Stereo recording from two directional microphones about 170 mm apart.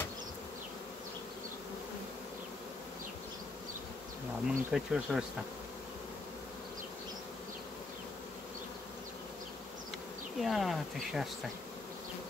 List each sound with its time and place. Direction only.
4.5 s speech: 5° right (ahead or behind)
10.4 s speech: centre (ahead or behind)